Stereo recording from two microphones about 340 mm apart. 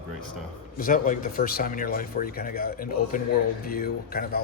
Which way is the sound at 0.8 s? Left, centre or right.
Left.